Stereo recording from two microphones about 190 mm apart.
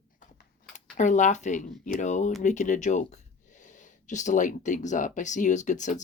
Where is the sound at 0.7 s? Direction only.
40° left (ahead or behind).